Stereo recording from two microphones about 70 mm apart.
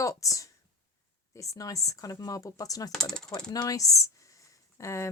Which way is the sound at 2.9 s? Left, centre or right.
Centre.